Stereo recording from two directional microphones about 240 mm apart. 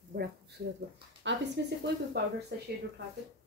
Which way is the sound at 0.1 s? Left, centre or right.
Right.